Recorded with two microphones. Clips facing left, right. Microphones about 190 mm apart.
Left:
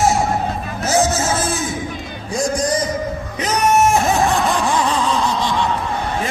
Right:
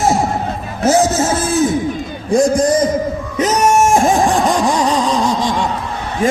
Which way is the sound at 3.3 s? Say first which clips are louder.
Right 3 dB; 45° right (ahead or behind).